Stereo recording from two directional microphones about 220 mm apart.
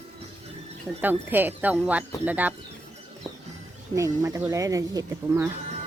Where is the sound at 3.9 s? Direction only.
15° right (ahead or behind).